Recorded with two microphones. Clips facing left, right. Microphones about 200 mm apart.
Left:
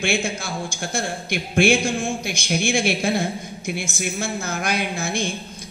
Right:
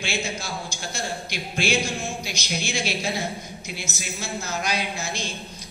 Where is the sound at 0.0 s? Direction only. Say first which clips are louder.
Left 6 dB; 55° left (ahead or behind).